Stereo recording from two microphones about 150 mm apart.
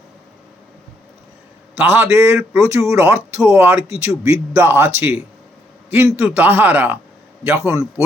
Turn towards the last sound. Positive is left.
turn(degrees=-15)  # may be behind; listen again after turning